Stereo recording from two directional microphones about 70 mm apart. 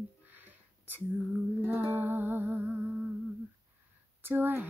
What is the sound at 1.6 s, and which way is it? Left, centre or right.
Music, right.